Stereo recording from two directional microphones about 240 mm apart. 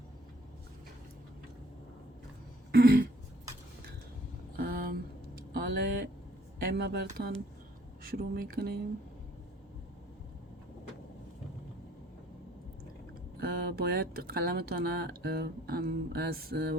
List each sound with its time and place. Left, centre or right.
2.7 s throat clearing: right
4.5 s a sound: right
6.6 s speech: right
13.3 s speech: right